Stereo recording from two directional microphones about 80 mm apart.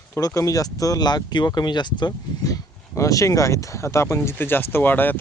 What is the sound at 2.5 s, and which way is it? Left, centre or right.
Speech, left.